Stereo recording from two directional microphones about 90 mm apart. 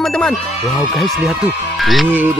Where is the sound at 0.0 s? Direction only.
5° left (ahead or behind).